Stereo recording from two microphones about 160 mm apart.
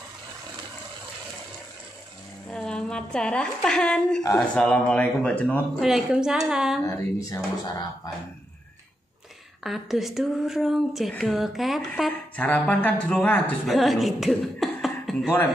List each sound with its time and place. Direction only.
2.5 s a woman's voice: 5° left (ahead or behind)
6.8 s speech: 20° left (ahead or behind)
9.6 s speech: centre (ahead or behind)